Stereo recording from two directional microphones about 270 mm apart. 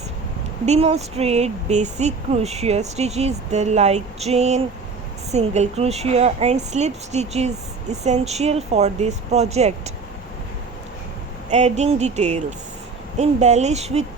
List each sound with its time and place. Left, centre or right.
0.6 s a woman's voice: right
11.5 s a woman's voice: right